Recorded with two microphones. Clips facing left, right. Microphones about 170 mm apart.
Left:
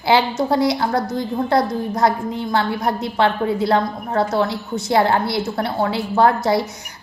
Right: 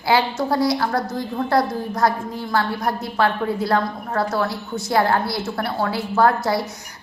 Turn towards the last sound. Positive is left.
turn(degrees=25)  # may be behind; listen again after turning